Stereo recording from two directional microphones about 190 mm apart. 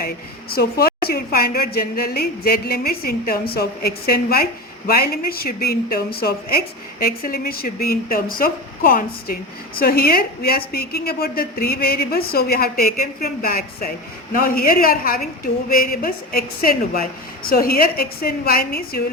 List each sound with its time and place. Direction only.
0.5 s speech: 55° left (ahead or behind)